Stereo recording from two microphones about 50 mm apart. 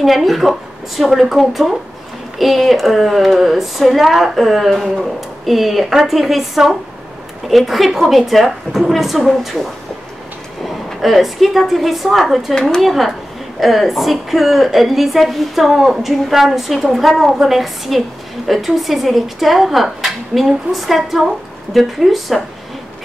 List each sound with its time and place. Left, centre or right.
0.0 s a woman's voice: centre
12.5 s speech: centre
12.8 s speech: centre